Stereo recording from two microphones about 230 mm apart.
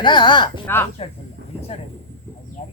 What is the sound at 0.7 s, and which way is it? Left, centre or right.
Speech, centre.